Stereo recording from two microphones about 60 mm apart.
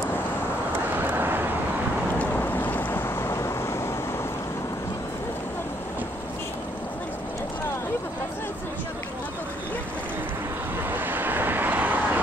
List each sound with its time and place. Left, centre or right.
0.9 s vehicle: right
2.1 s boat: left
10.8 s vehicle: right